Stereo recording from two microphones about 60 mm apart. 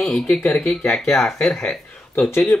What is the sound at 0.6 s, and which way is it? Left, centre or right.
Speech, centre.